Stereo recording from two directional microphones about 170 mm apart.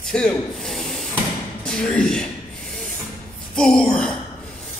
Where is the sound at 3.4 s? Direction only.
5° left (ahead or behind).